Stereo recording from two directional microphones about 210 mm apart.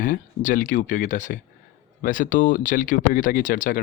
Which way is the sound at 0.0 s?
40° left (ahead or behind).